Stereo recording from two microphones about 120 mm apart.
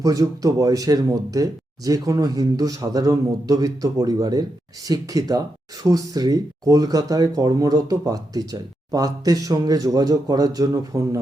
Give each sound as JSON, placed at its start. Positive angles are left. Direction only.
{"t": 0.0, "sound": "speech", "side_deg": -30}